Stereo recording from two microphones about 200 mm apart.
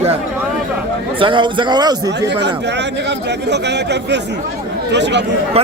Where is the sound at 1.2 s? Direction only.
25° right (ahead or behind).